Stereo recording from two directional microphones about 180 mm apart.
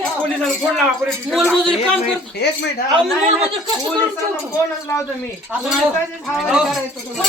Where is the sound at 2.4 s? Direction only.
70° left (ahead or behind).